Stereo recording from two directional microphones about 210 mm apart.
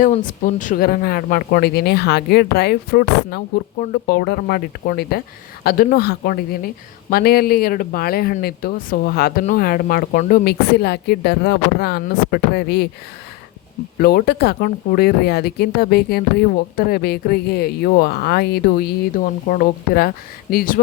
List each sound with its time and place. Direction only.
0.0 s speech: 40° left (ahead or behind)
14.0 s speech: 50° left (ahead or behind)
19.1 s speech: 40° left (ahead or behind)